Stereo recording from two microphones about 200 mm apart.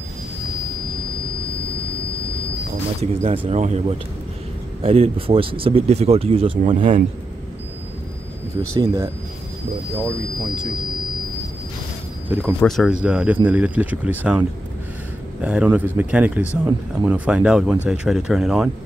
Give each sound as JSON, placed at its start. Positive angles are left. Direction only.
{"t": 3.0, "sound": "speech", "side_deg": -30}
{"t": 4.8, "sound": "speech", "side_deg": -30}
{"t": 12.3, "sound": "speech", "side_deg": -10}
{"t": 12.5, "sound": "speech", "side_deg": 0}
{"t": 15.4, "sound": "speech", "side_deg": -5}